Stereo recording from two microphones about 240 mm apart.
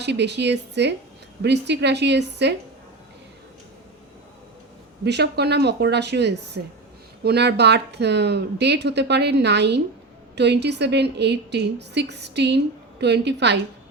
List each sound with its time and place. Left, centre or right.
0.0 s speech: right
5.0 s speech: right